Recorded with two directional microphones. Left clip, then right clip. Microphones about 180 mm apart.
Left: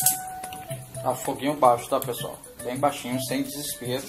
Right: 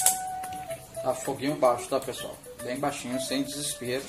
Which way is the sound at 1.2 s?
Centre (ahead or behind).